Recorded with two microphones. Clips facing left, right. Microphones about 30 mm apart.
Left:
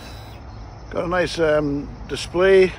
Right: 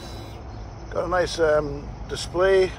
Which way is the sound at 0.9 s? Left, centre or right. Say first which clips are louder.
Left 2 dB; left.